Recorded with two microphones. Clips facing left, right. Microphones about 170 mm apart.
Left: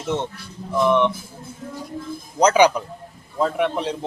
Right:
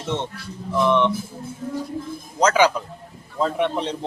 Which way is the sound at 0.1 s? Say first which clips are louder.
Left 1 dB; 10° left (ahead or behind).